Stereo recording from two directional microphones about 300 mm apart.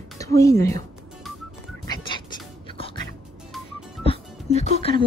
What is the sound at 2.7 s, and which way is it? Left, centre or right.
Music, centre.